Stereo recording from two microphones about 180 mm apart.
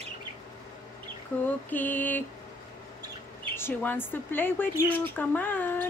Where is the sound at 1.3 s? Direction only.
5° left (ahead or behind).